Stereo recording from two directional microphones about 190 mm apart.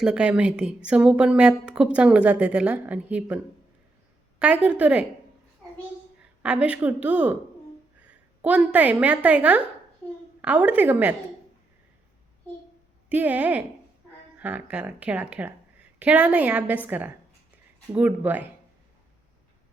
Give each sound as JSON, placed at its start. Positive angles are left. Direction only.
{"t": 0.0, "sound": "a woman's voice", "side_deg": -5}
{"t": 6.4, "sound": "a woman's voice", "side_deg": -5}
{"t": 8.4, "sound": "a woman's voice", "side_deg": -5}
{"t": 13.1, "sound": "a woman's voice", "side_deg": -10}